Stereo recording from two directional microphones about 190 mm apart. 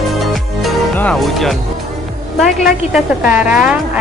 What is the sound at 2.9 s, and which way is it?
Speech, 5° right (ahead or behind).